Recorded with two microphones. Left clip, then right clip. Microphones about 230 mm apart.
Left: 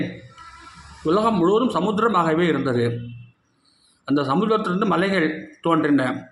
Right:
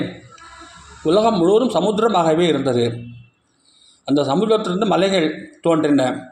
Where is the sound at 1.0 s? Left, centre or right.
Centre.